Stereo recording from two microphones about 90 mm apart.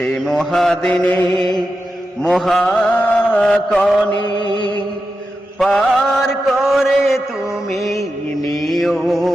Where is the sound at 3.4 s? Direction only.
5° left (ahead or behind).